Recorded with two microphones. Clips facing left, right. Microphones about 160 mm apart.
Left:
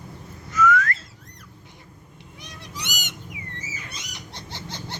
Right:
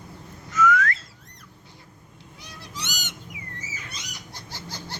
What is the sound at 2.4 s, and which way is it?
Goose, 20° left (ahead or behind).